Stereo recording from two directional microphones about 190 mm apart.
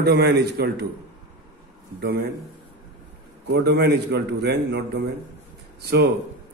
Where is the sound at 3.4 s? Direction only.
60° right (ahead or behind).